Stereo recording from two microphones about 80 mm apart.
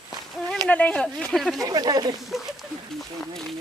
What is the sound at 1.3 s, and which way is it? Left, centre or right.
Speech, centre.